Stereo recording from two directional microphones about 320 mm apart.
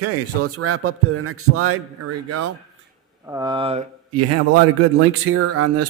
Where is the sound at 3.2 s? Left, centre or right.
Centre.